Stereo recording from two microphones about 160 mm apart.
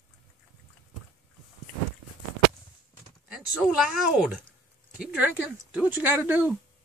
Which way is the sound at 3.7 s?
Centre (ahead or behind).